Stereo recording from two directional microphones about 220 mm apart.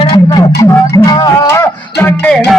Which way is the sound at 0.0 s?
25° left (ahead or behind).